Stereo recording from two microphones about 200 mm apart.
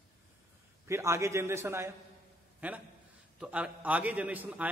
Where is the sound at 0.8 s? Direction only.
15° right (ahead or behind).